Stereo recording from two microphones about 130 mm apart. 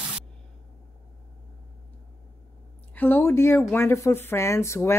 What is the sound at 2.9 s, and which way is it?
Speech, 15° left (ahead or behind).